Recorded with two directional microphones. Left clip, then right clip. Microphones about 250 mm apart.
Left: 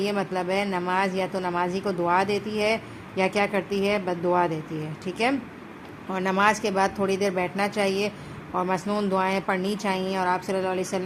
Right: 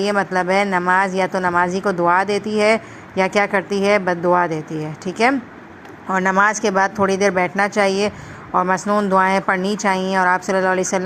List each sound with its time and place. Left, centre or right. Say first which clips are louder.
0.0 s a woman's voice: right 8 dB; right